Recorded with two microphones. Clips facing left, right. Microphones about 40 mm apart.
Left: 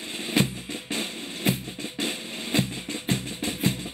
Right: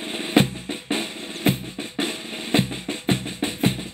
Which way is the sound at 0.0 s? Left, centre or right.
Right.